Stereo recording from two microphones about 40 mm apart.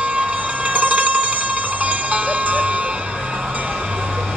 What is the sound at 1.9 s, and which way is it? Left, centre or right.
Cowbell, right.